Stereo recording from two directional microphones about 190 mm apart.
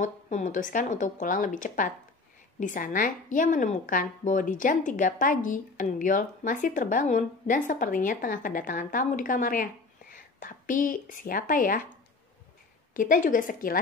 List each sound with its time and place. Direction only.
0.0 s a woman's voice: 40° left (ahead or behind)
12.9 s a woman's voice: 45° left (ahead or behind)